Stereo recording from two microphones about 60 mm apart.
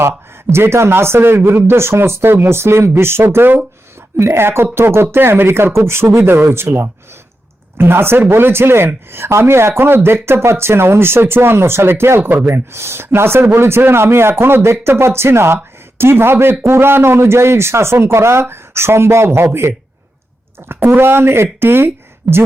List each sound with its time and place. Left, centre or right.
0.5 s speech: right
20.8 s speech: right